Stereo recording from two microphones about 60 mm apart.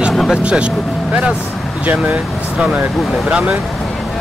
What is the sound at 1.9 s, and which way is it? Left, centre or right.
Speech, right.